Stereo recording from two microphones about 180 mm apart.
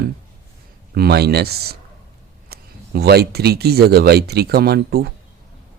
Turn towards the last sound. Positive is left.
turn(degrees=-60)  # may be behind; listen again after turning